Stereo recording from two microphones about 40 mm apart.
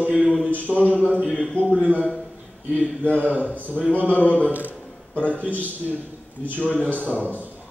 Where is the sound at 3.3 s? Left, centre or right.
Left.